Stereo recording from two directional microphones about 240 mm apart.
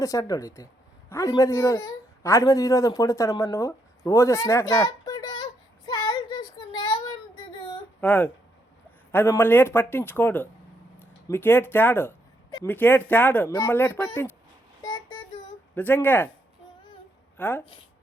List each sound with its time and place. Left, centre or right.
0.0 s speech: centre
6.7 s child singing: centre
8.0 s speech: centre
14.8 s child singing: centre
15.7 s speech: centre
17.3 s a woman's voice: centre